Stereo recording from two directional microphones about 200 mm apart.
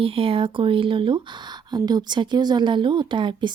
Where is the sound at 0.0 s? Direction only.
25° right (ahead or behind).